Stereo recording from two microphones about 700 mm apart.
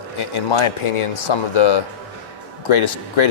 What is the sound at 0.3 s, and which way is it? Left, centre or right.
A man's voice, left.